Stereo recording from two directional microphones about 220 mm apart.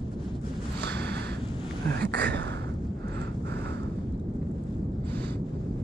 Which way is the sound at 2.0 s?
50° right (ahead or behind).